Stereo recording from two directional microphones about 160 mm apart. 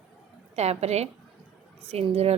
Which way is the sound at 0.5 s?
40° right (ahead or behind).